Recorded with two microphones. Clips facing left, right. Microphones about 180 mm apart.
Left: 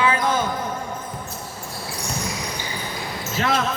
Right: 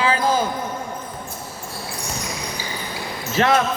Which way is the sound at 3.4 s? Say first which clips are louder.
Right 5 dB; 75° right (ahead or behind).